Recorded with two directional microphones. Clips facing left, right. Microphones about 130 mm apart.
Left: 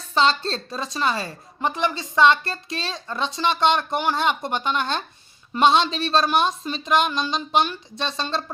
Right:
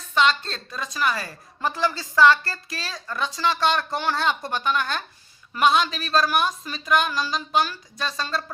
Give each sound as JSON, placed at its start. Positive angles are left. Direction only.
{"t": 0.1, "sound": "a woman's voice", "side_deg": 30}